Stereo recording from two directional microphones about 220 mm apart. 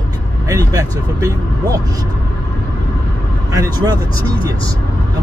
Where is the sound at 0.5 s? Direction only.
15° right (ahead or behind).